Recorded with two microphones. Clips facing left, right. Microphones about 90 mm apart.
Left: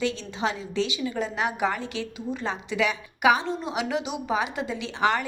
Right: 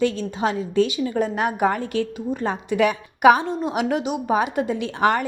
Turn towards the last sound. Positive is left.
turn(degrees=-50)  # may be behind; listen again after turning